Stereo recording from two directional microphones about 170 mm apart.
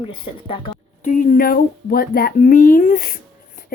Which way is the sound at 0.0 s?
30° left (ahead or behind).